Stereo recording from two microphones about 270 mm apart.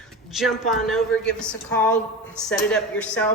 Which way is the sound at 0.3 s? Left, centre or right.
Centre.